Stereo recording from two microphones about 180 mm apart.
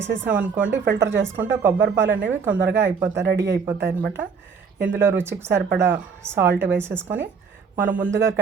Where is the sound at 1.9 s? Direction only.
90° right.